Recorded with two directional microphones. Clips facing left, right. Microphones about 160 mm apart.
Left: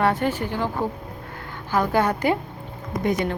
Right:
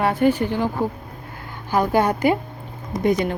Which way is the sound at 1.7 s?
15° right (ahead or behind).